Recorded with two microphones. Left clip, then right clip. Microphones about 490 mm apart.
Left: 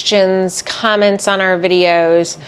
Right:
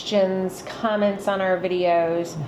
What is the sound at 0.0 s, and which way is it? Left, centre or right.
Speech, left.